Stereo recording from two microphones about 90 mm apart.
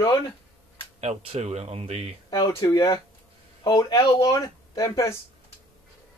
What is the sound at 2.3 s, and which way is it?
Speech, 45° left (ahead or behind).